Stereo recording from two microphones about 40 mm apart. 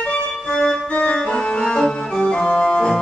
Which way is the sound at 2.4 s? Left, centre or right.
Left.